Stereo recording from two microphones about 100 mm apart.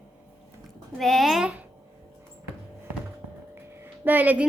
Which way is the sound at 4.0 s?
20° right (ahead or behind).